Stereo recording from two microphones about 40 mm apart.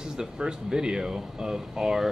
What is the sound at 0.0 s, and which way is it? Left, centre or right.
Speech, centre.